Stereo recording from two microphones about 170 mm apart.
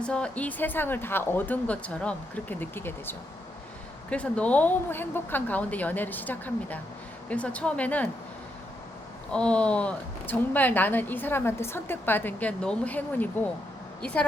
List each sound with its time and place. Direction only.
0.0 s a woman's voice: 5° left (ahead or behind)
9.3 s a woman's voice: 5° left (ahead or behind)